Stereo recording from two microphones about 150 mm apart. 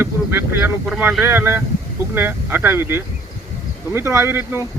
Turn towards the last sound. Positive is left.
turn(degrees=-15)  # may be behind; listen again after turning